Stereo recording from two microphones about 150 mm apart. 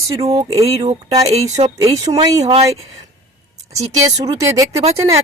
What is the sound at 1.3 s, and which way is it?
Speech, 50° right (ahead or behind).